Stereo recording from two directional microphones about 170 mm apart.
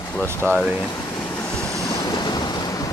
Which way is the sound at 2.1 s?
25° left (ahead or behind).